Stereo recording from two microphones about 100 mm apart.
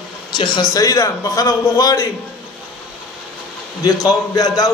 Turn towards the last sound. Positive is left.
turn(degrees=40)  # may be behind; listen again after turning